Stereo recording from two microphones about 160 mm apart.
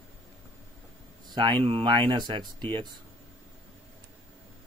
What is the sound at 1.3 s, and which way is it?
Speech, 30° right (ahead or behind).